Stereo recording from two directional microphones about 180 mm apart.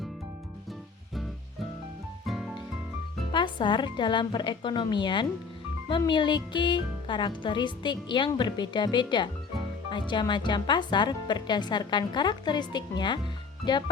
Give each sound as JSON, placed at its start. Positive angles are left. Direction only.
{"t": 2.2, "sound": "music", "side_deg": 0}
{"t": 3.3, "sound": "speech", "side_deg": 25}